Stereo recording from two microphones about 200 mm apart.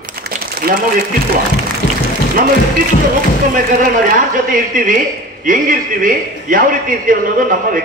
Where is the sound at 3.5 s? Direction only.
40° right (ahead or behind).